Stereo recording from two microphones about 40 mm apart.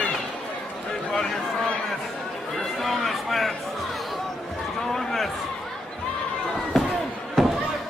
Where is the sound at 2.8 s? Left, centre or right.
Centre.